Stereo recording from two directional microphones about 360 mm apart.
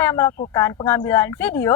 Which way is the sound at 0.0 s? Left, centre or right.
Centre.